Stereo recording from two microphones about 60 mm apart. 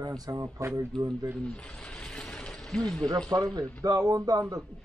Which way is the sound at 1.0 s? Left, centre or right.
Right.